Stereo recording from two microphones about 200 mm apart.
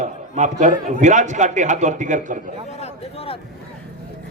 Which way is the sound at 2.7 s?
35° left (ahead or behind).